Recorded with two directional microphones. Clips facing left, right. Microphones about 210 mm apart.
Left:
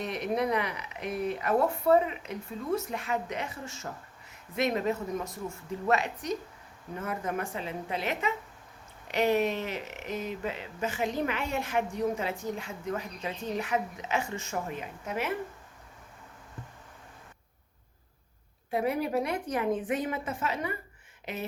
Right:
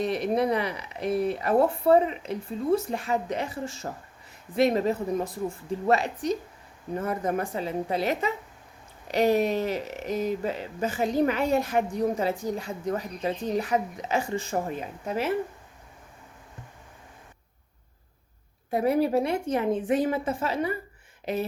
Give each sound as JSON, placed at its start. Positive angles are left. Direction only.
{"t": 0.0, "sound": "speech", "side_deg": -35}
{"t": 18.7, "sound": "speech", "side_deg": -40}